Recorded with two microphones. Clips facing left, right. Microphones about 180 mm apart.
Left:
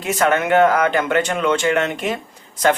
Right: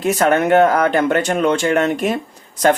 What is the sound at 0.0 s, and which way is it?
Speech, 40° right (ahead or behind).